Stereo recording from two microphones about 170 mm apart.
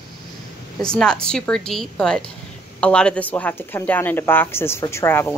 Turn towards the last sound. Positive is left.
turn(degrees=15)  # may be behind; listen again after turning